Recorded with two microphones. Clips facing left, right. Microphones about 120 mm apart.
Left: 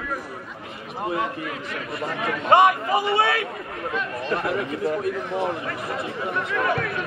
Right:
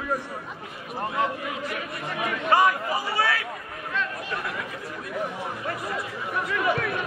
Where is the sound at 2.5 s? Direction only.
25° left (ahead or behind).